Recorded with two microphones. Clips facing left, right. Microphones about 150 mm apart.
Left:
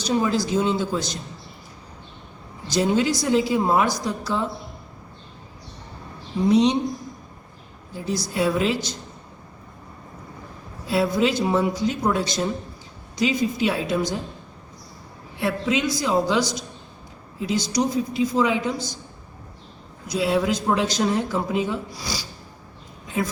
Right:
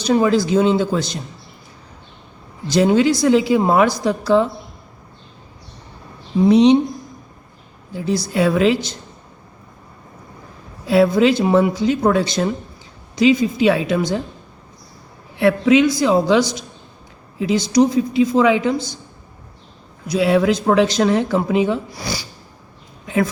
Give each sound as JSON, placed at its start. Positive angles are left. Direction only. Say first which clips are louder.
{"t": 0.0, "sound": "speech", "louder": "right 6 dB", "side_deg": -75}
{"t": 2.7, "sound": "speech", "louder": "right 6 dB", "side_deg": -75}
{"t": 6.5, "sound": "speech", "louder": "right 6 dB", "side_deg": -70}
{"t": 8.3, "sound": "speech", "louder": "right 6 dB", "side_deg": -75}
{"t": 10.8, "sound": "speech", "louder": "right 7 dB", "side_deg": -65}
{"t": 15.4, "sound": "speech", "louder": "right 10 dB", "side_deg": -65}
{"t": 20.1, "sound": "speech", "louder": "right 6 dB", "side_deg": -70}